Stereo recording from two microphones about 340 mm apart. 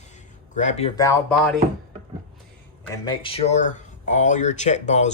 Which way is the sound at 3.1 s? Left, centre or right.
Centre.